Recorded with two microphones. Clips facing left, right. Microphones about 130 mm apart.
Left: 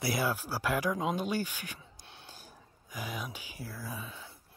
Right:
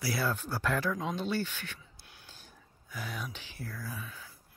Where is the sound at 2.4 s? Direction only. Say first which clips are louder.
Left 3 dB; 15° left (ahead or behind).